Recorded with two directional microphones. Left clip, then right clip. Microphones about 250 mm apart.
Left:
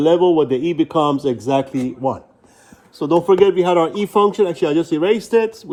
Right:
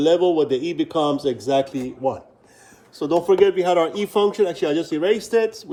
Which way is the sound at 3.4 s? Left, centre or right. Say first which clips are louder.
Left 3 dB; centre.